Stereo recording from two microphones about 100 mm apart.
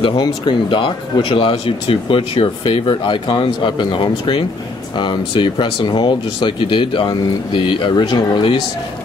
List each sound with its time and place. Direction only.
0.0 s speech: 50° left (ahead or behind)